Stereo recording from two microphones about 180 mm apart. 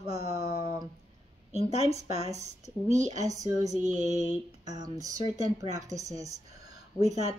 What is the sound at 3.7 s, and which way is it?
Speech, 40° right (ahead or behind).